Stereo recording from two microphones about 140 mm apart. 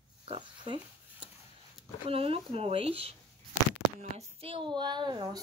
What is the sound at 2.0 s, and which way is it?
Speech, 45° right (ahead or behind).